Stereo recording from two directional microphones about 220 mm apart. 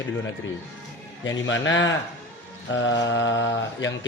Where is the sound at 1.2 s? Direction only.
60° left (ahead or behind).